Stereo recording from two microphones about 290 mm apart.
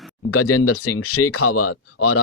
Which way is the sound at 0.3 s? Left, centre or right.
Left.